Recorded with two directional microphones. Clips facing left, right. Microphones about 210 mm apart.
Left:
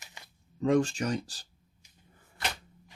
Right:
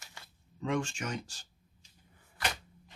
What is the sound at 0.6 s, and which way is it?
Speech, 40° left (ahead or behind).